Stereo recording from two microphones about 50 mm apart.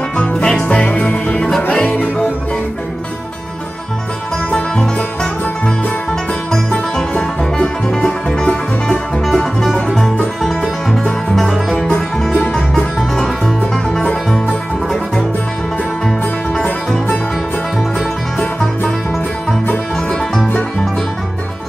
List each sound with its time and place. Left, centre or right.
0.3 s music: centre
0.7 s music: left
4.5 s music: centre
7.0 s music: centre
11.3 s music: centre